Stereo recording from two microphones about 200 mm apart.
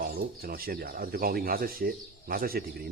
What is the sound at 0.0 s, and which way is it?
Speech, 50° right (ahead or behind).